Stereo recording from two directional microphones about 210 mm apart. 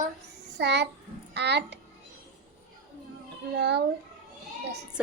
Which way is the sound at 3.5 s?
55° right (ahead or behind).